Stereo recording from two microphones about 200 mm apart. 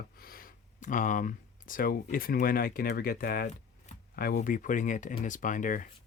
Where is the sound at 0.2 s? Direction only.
45° left (ahead or behind).